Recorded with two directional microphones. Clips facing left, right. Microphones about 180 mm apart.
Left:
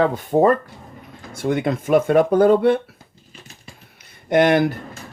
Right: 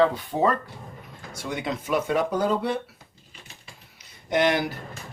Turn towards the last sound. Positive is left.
turn(degrees=55)  # may be behind; listen again after turning